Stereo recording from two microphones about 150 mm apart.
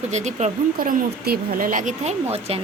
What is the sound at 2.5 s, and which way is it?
Speech, 45° right (ahead or behind).